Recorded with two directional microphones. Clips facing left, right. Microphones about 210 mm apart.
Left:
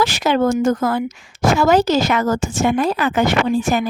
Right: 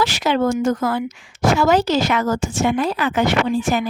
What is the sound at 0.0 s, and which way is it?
Speech, 45° left (ahead or behind).